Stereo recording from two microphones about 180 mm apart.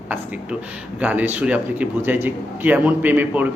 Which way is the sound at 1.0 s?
10° right (ahead or behind).